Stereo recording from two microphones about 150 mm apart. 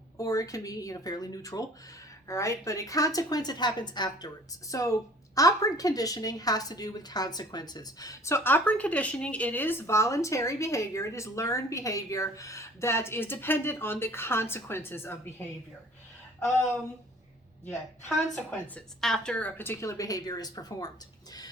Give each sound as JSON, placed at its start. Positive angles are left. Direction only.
{"t": 0.2, "sound": "a woman's voice", "side_deg": 20}
{"t": 18.5, "sound": "a woman's voice", "side_deg": 5}